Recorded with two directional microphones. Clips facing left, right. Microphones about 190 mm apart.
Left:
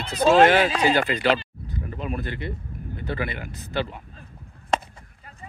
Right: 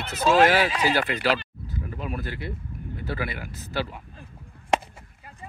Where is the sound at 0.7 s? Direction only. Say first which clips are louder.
Left 3 dB; 45° left (ahead or behind).